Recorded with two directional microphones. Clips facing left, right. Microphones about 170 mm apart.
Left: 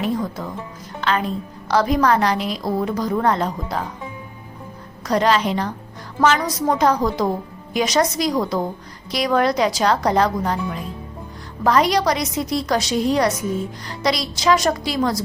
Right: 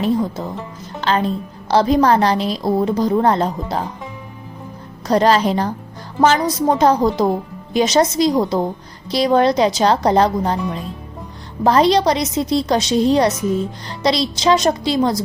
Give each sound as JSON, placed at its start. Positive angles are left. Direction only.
{"t": 0.0, "sound": "a woman's voice", "side_deg": -25}
{"t": 5.0, "sound": "a woman's voice", "side_deg": -35}